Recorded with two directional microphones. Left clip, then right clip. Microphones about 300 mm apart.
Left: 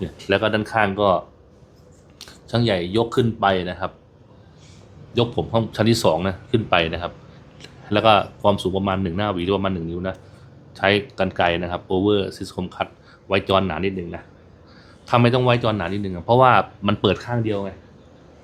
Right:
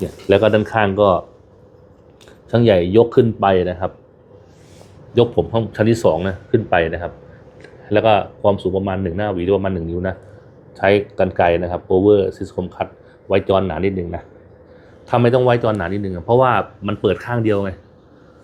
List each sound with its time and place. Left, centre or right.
0.0 s speech: centre
2.5 s speech: centre
5.1 s speech: centre
16.9 s speech: left
17.4 s speech: centre